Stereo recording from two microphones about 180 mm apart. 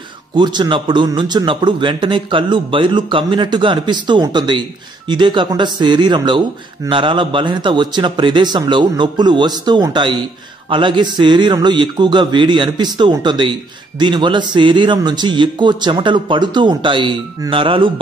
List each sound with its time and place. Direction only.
0.4 s a man's voice: 25° right (ahead or behind)